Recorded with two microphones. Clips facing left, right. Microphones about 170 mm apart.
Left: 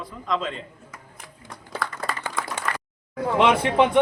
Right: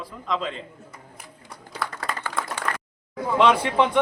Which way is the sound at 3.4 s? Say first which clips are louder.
Left 1 dB; 20° left (ahead or behind).